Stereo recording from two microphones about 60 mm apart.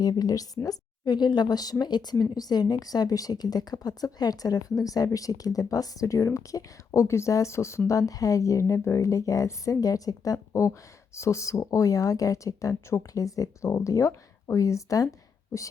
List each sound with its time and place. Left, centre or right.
0.0 s a woman's voice: left
4.8 s speech: left
10.3 s speech: left